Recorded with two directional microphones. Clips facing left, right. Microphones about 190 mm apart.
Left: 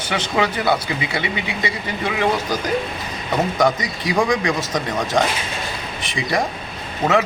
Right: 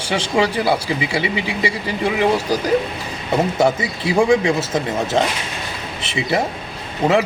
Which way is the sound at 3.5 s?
25° right (ahead or behind).